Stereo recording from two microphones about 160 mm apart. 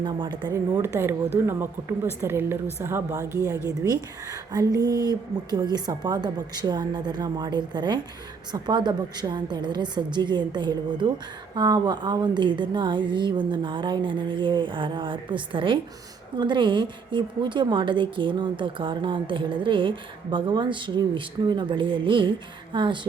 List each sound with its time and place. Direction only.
0.0 s a woman's voice: 25° right (ahead or behind)
0.9 s a woman's voice: 15° right (ahead or behind)
4.8 s a woman's voice: 25° right (ahead or behind)